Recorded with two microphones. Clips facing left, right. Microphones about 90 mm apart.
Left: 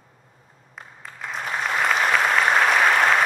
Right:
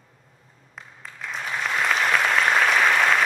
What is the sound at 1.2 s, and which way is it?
Applause, centre (ahead or behind).